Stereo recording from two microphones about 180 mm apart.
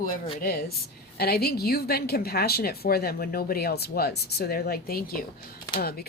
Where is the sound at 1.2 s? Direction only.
60° left (ahead or behind).